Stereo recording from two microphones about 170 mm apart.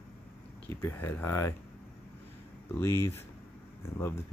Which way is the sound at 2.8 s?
15° left (ahead or behind).